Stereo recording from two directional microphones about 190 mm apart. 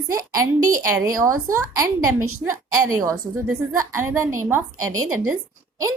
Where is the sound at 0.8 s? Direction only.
15° right (ahead or behind).